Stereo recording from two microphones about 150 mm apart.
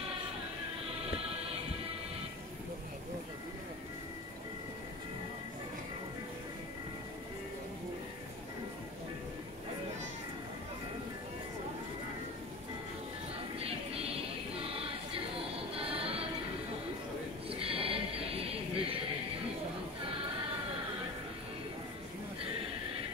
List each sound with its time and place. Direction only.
13.6 s music: 40° right (ahead or behind)
15.3 s music: 40° right (ahead or behind)
17.5 s a sound: 40° right (ahead or behind)